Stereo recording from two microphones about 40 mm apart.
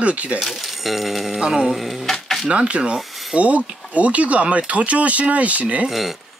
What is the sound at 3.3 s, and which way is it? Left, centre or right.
Speech, right.